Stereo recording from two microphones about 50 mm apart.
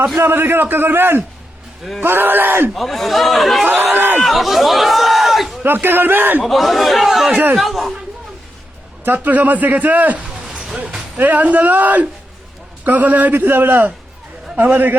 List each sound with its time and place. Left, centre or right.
0.2 s a man's voice: right
2.7 s speech: centre
3.9 s a sound: right
4.3 s chatter: centre
5.6 s a man's voice: right
6.4 s speech: centre
7.3 s speech: right
7.5 s speech: centre
9.0 s a man's voice: right